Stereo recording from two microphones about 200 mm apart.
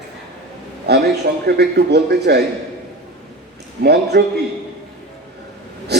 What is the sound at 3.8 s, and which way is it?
Speech, 55° right (ahead or behind).